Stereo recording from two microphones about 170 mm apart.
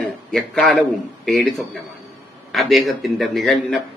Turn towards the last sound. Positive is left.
turn(degrees=0)  # may be behind; listen again after turning